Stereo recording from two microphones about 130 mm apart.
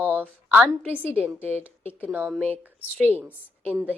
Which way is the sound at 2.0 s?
15° right (ahead or behind).